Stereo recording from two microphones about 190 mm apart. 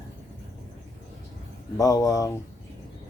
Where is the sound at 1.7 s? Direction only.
20° left (ahead or behind).